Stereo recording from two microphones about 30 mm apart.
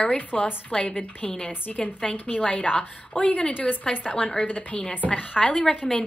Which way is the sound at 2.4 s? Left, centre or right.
Left.